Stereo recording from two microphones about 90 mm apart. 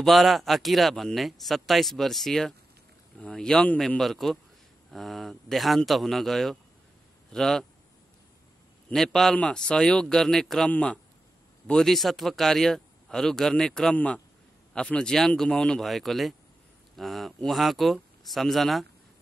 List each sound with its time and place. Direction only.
0.0 s speech: centre (ahead or behind)
8.9 s speech: 5° left (ahead or behind)